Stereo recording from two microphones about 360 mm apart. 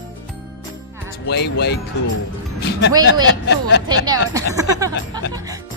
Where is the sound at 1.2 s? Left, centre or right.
Left.